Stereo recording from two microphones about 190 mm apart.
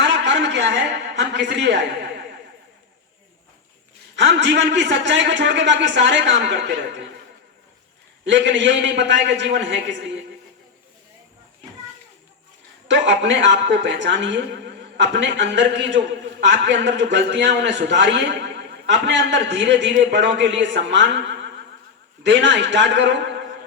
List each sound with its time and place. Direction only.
0.0 s a sound: 70° right (ahead or behind)
4.1 s a man's voice: 70° right (ahead or behind)
8.2 s a man's voice: 70° right (ahead or behind)
12.9 s a man's voice: 70° right (ahead or behind)